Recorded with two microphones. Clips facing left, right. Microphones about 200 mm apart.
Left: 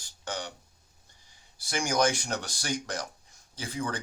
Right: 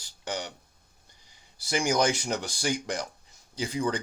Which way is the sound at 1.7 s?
10° right (ahead or behind).